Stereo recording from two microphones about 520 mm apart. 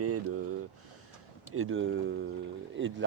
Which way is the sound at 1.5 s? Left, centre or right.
Right.